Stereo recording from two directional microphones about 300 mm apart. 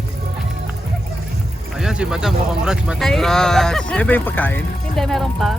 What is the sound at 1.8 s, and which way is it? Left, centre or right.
Speech, centre.